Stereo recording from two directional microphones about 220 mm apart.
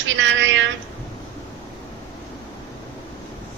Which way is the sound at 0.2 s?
55° right (ahead or behind).